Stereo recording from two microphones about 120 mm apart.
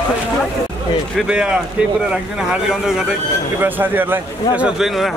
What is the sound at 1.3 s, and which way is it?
A man's voice, 10° right (ahead or behind).